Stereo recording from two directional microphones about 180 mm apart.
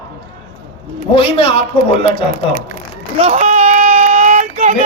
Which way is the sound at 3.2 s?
35° right (ahead or behind).